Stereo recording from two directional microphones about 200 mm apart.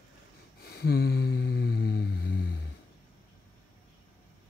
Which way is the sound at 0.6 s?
50° left (ahead or behind).